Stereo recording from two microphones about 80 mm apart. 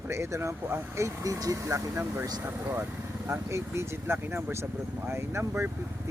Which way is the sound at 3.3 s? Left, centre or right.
Right.